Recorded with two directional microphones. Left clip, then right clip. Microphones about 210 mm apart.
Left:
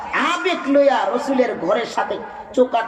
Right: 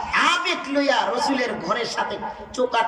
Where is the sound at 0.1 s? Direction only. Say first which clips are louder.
Left 1 dB; 20° left (ahead or behind).